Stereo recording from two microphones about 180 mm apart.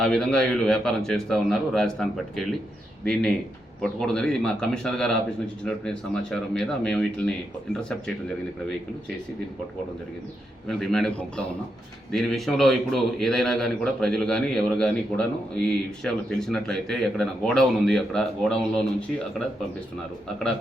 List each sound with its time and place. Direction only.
0.0 s a man's voice: 5° left (ahead or behind)
10.7 s a man's voice: centre (ahead or behind)
12.1 s a man's voice: centre (ahead or behind)